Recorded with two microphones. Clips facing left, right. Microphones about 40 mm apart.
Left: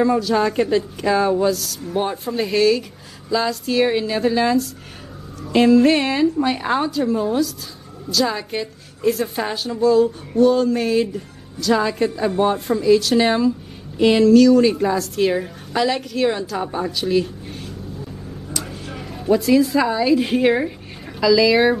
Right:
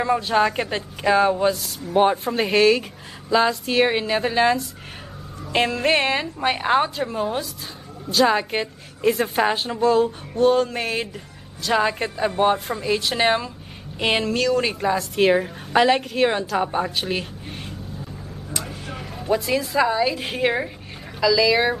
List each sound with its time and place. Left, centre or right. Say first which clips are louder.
0.0 s a woman's voice: left 2 dB; right
5.7 s a woman's voice: left 8 dB; right
9.8 s a sound: left 5 dB; centre
10.7 s a woman's voice: left 7 dB; centre
18.6 s a woman's voice: even; centre